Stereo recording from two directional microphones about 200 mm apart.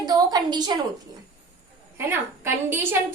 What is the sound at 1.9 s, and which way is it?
A woman's voice, 10° right (ahead or behind).